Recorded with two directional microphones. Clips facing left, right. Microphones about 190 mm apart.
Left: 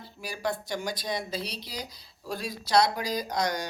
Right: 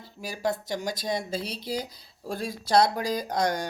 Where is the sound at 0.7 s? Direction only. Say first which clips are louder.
Right 2 dB; 40° right (ahead or behind).